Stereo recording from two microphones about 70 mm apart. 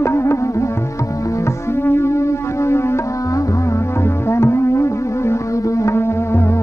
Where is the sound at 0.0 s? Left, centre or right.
Left.